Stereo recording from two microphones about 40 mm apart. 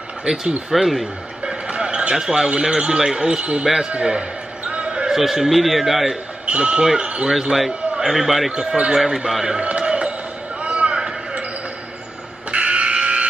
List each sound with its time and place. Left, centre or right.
0.7 s a man's voice: centre
1.7 s a man's voice: right
4.6 s basketball bounce: right
5.1 s a man's voice: centre
6.4 s a man's voice: right
7.9 s a man's voice: centre
8.5 s speech: right
8.9 s a man's voice: centre
9.6 s a sound: right
12.4 s a sound: right